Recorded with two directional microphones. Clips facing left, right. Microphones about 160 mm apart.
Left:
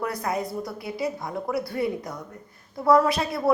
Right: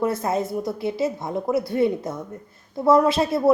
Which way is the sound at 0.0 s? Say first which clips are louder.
Right 5 dB; 25° right (ahead or behind).